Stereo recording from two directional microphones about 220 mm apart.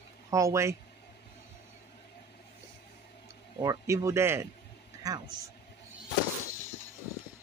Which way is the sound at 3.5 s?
15° right (ahead or behind).